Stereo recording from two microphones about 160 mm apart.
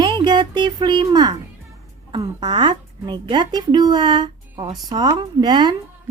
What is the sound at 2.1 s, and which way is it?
A woman's voice, 30° right (ahead or behind).